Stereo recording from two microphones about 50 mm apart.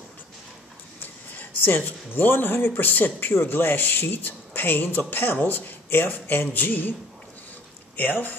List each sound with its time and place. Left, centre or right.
1.3 s speech: left